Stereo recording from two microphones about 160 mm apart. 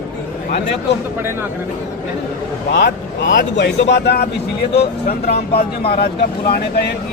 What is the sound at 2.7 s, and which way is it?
Speech, 90° left.